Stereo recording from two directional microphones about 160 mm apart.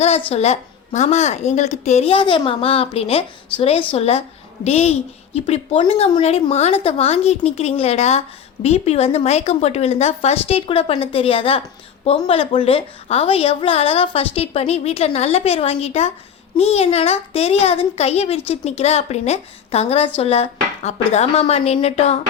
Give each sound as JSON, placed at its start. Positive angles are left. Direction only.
{"t": 0.0, "sound": "a woman's voice", "side_deg": 40}